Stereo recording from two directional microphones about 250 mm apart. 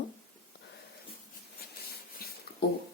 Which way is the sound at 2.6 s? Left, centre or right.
Left.